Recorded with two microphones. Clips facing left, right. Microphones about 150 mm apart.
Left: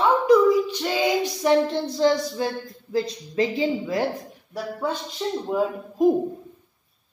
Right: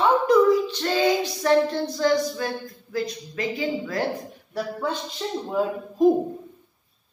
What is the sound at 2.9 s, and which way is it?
Speech, 30° left (ahead or behind).